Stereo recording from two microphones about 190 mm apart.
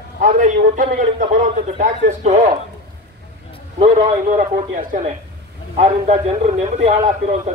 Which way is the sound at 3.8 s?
35° right (ahead or behind).